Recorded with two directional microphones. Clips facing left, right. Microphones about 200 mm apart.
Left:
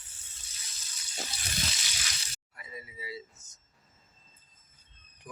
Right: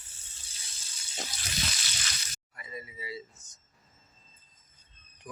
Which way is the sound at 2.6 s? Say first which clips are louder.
Right 2 dB; 5° left (ahead or behind).